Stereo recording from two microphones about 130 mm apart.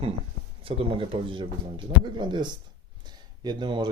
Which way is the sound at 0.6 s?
45° right (ahead or behind).